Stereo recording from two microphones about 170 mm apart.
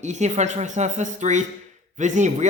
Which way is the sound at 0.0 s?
45° right (ahead or behind).